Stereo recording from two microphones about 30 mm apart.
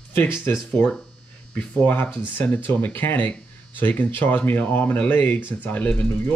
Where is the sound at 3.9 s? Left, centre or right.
Left.